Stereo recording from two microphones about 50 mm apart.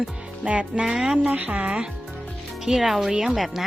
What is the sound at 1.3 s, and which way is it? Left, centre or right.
Speech, right.